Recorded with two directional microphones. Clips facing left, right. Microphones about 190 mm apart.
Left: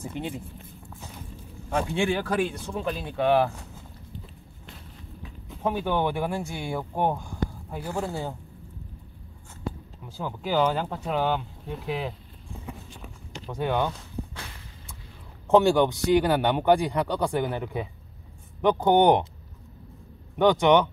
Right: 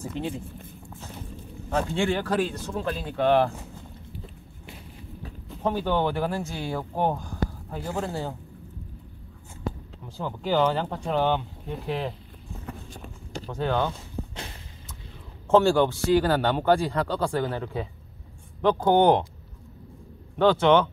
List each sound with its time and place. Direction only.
0.0 s a man's voice: 15° left (ahead or behind)
1.7 s a man's voice: 10° left (ahead or behind)
5.5 s a man's voice: 10° left (ahead or behind)
8.0 s a man's voice: 15° left (ahead or behind)
10.0 s a man's voice: 5° left (ahead or behind)
13.5 s a man's voice: 15° left (ahead or behind)
14.3 s a sound: 30° right (ahead or behind)
15.4 s a man's voice: 15° left (ahead or behind)
20.3 s a man's voice: 15° left (ahead or behind)